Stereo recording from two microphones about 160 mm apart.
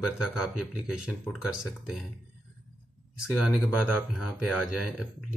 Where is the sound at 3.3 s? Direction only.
Centre (ahead or behind).